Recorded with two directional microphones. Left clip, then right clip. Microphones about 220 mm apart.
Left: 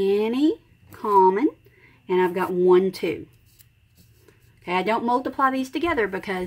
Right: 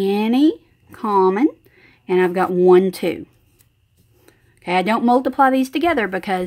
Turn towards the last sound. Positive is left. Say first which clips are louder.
# right 5 dB
turn(degrees=-45)  # may be behind; listen again after turning